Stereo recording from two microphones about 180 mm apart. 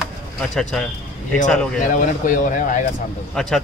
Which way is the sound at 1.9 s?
45° left (ahead or behind).